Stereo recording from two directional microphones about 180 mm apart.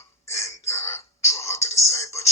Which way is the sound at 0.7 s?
15° left (ahead or behind).